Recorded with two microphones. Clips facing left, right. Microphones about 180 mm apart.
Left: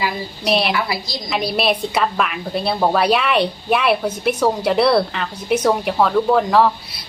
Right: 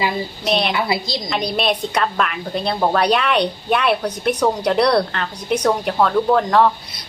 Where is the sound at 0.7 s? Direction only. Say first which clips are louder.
Right 1 dB; 25° right (ahead or behind).